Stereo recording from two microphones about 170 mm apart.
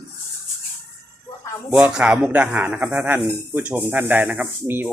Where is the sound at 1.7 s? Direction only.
5° right (ahead or behind).